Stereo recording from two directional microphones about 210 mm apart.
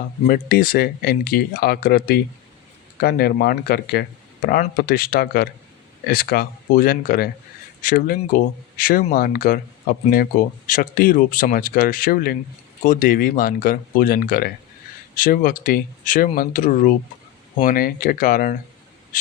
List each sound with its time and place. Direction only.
0.3 s speech: 45° left (ahead or behind)